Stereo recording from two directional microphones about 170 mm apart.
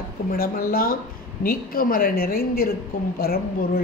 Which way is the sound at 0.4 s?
55° left (ahead or behind).